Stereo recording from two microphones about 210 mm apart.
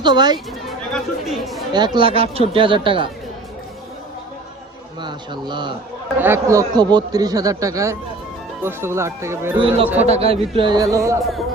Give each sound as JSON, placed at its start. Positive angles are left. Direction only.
{"t": 0.9, "sound": "speech", "side_deg": 0}
{"t": 1.7, "sound": "speech", "side_deg": -20}
{"t": 4.9, "sound": "speech", "side_deg": -20}
{"t": 6.1, "sound": "speech", "side_deg": -10}
{"t": 9.6, "sound": "speech", "side_deg": -25}
{"t": 11.2, "sound": "speech", "side_deg": 0}